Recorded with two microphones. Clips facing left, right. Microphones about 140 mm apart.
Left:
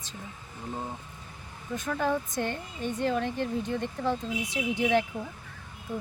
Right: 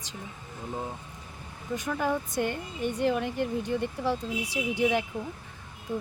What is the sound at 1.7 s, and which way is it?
Speech, 10° right (ahead or behind).